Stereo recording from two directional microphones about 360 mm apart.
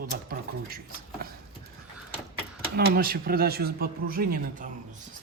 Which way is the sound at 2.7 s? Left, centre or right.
Right.